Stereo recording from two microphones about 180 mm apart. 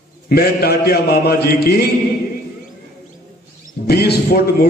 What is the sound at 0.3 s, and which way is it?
A man's voice, 60° left (ahead or behind).